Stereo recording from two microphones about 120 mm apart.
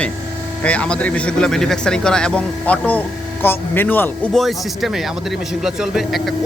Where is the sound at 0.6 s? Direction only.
10° left (ahead or behind).